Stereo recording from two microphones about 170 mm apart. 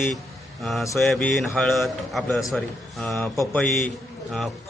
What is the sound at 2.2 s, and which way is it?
Speech, 15° left (ahead or behind).